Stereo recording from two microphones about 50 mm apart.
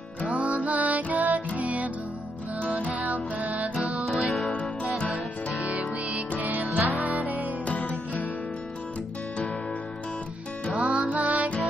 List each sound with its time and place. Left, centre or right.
0.3 s music: right
2.9 s music: right
4.0 s music: centre
5.7 s music: right
7.6 s music: left
10.8 s music: centre
11.1 s music: right